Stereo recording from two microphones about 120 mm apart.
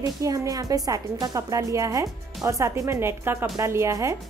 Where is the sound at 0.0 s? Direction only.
25° right (ahead or behind).